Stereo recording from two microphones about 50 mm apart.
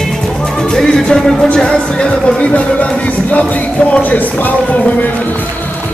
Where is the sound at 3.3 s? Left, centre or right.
Left.